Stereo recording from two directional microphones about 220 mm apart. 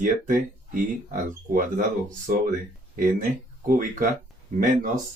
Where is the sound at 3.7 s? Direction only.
40° right (ahead or behind).